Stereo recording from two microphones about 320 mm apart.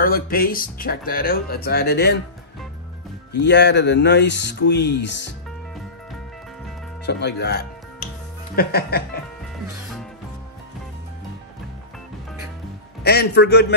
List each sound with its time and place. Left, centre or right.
0.0 s speech: left
3.3 s speech: left
7.1 s speech: left
13.0 s speech: left